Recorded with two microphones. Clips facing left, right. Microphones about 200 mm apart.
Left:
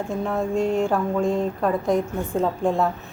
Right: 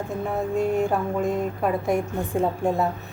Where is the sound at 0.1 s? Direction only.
5° right (ahead or behind).